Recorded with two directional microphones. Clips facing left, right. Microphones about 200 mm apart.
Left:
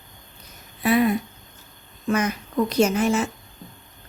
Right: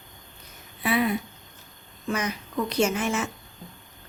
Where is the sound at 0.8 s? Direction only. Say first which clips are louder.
Left 5 dB; 45° left (ahead or behind).